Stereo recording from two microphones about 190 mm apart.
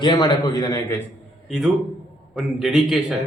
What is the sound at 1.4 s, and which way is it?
A man's voice, centre (ahead or behind).